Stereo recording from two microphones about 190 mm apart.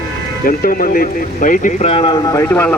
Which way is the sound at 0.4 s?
50° left (ahead or behind).